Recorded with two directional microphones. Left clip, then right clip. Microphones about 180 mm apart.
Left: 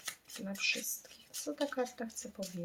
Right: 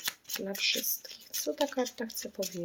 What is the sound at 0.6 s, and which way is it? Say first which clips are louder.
Speech: right 3 dB; 30° right (ahead or behind).